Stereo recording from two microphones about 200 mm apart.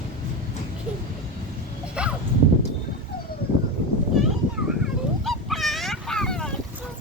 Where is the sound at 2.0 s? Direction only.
5° right (ahead or behind).